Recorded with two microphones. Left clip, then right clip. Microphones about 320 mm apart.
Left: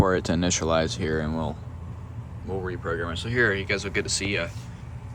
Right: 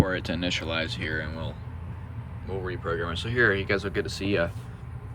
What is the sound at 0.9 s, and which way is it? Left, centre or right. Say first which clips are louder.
Speech: left 3 dB; centre.